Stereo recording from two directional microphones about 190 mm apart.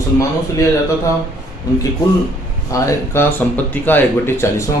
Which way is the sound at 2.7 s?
15° left (ahead or behind).